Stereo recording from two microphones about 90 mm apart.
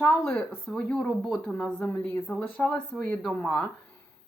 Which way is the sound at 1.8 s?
20° left (ahead or behind).